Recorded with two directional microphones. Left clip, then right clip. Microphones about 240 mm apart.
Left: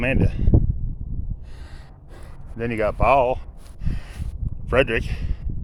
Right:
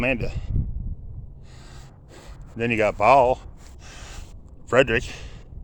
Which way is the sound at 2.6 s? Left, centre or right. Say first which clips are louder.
Right 2 dB; centre.